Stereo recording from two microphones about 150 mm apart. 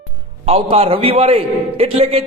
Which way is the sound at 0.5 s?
35° right (ahead or behind).